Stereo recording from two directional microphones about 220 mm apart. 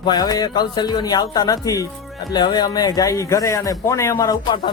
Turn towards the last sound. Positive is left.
turn(degrees=20)  # may be behind; listen again after turning